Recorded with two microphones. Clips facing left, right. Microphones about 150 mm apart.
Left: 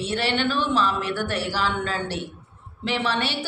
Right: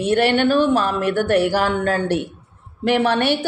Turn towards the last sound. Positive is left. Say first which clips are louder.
# right 8 dB
turn(degrees=-50)  # may be behind; listen again after turning